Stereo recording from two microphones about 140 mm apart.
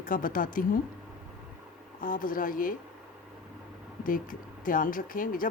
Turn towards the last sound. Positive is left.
turn(degrees=80)